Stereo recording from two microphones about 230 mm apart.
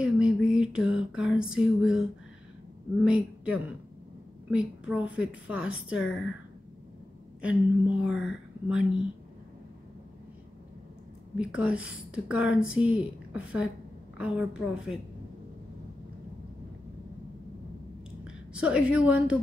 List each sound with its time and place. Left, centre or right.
0.0 s a sound: centre
1.3 s a woman's voice: centre
7.4 s a woman's voice: centre
11.3 s a woman's voice: centre
18.5 s a woman's voice: centre